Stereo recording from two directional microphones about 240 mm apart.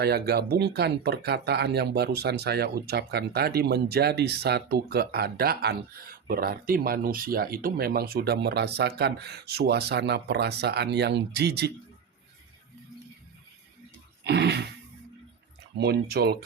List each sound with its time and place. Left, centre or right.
0.0 s speech: right
14.3 s a sound: right
15.8 s speech: right